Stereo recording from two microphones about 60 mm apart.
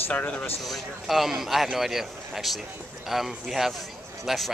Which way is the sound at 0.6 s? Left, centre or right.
Centre.